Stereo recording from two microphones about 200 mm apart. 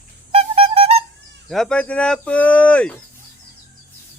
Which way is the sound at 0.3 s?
30° right (ahead or behind).